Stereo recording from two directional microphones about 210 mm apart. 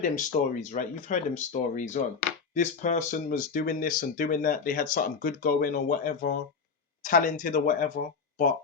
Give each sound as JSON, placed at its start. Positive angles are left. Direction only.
{"t": 0.0, "sound": "speech", "side_deg": 40}